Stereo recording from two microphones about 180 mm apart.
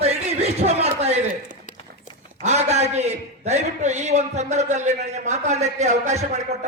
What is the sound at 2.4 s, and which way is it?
A man's voice, 40° right (ahead or behind).